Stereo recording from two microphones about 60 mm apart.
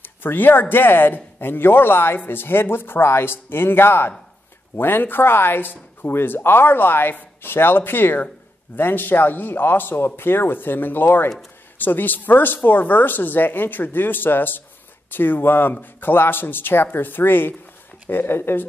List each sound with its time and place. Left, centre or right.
0.0 s speech: left